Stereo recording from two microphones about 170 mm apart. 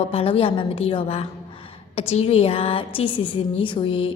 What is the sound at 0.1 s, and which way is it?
A woman's voice, 35° left (ahead or behind).